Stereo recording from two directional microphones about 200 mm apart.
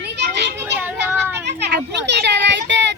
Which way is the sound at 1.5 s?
60° right (ahead or behind).